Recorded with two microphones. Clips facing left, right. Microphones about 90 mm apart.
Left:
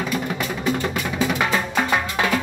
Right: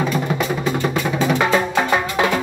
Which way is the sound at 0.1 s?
25° right (ahead or behind).